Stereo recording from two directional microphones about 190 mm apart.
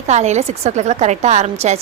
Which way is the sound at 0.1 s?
35° right (ahead or behind).